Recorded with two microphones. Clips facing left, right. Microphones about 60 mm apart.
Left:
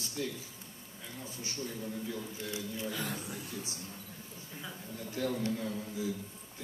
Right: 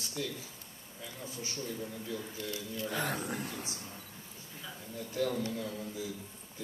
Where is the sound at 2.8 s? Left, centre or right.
Right.